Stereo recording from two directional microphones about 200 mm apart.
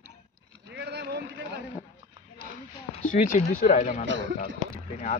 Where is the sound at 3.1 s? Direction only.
40° left (ahead or behind).